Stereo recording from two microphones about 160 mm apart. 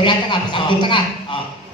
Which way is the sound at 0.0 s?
30° left (ahead or behind).